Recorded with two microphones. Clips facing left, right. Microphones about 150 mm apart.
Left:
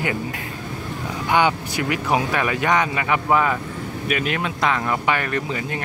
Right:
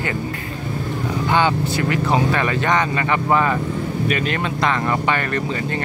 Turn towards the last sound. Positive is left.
turn(degrees=5)  # may be behind; listen again after turning